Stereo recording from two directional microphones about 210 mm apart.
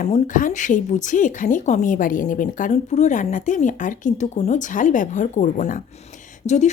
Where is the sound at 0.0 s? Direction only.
35° left (ahead or behind).